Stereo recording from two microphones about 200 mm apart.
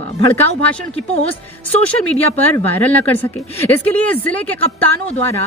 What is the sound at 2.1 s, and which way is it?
Speech, 10° left (ahead or behind).